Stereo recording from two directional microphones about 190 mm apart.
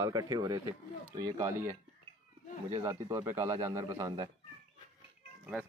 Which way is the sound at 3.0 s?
20° right (ahead or behind).